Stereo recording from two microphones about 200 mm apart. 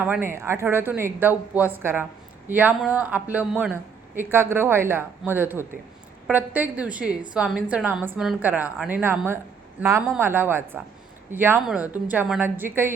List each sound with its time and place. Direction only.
0.0 s speech: 10° right (ahead or behind)